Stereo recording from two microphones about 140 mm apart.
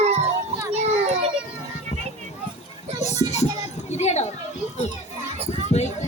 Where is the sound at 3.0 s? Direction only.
55° left (ahead or behind).